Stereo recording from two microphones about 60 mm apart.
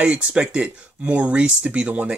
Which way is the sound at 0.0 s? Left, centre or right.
Centre.